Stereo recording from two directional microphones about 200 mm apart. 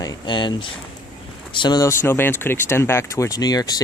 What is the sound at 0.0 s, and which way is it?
Speech, 20° left (ahead or behind).